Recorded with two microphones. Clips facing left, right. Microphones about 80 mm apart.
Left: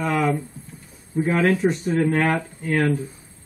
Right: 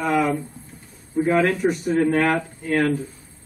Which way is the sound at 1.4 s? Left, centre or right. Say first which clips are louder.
Left 1 dB; centre.